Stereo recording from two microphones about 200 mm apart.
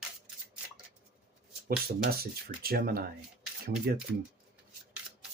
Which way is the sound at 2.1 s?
50° right (ahead or behind).